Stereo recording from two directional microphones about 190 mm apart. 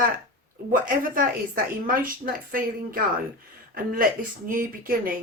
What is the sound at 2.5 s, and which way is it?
Speech, 50° right (ahead or behind).